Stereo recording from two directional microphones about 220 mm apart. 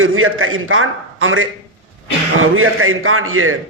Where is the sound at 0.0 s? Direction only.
65° right (ahead or behind).